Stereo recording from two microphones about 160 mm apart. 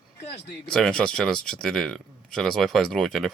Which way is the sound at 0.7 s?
5° left (ahead or behind).